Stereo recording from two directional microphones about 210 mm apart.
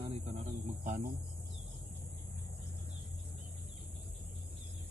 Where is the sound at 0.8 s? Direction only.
35° right (ahead or behind).